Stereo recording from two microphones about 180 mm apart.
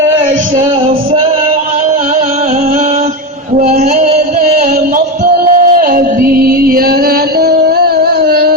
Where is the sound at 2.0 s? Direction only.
35° right (ahead or behind).